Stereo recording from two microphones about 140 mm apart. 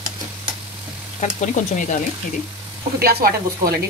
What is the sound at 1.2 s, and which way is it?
Speech, 65° left (ahead or behind).